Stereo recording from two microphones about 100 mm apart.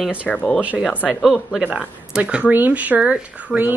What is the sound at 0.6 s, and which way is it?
Speech, 10° right (ahead or behind).